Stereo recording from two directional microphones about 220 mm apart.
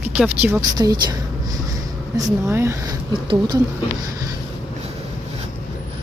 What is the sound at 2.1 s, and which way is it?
A woman's voice, 10° right (ahead or behind).